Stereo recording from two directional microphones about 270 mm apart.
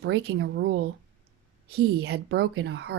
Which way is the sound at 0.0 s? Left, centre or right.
Right.